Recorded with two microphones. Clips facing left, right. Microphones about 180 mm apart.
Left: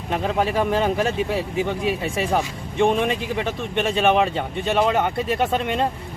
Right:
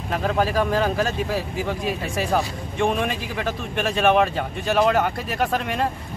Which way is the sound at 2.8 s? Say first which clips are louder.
Left 3 dB; 25° left (ahead or behind).